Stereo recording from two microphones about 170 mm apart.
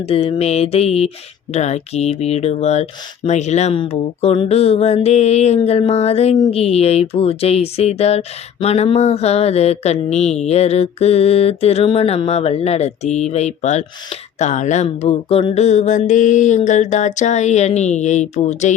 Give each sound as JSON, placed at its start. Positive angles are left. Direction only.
{"t": 0.1, "sound": "mantra", "side_deg": 35}
{"t": 15.0, "sound": "mantra", "side_deg": 30}